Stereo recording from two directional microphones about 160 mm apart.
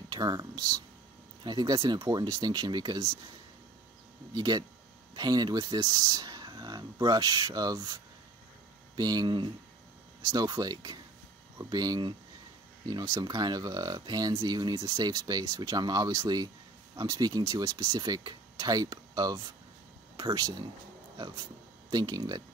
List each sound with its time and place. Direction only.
0.1 s speech: 25° right (ahead or behind)
4.3 s speech: 25° right (ahead or behind)
21.9 s speech: 25° right (ahead or behind)